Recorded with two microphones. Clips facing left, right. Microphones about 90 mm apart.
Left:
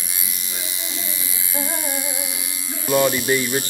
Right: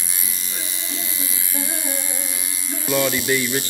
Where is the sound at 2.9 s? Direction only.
20° left (ahead or behind).